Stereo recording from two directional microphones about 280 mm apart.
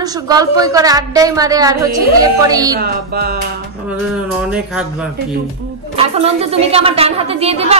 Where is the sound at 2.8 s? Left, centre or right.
Right.